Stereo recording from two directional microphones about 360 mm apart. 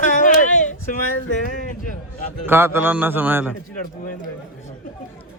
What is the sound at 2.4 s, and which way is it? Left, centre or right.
A man's voice, centre.